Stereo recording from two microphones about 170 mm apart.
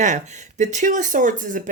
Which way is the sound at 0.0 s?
45° right (ahead or behind).